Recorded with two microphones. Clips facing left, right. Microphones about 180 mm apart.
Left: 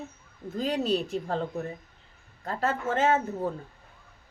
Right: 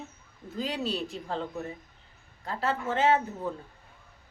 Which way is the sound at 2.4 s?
45° left (ahead or behind).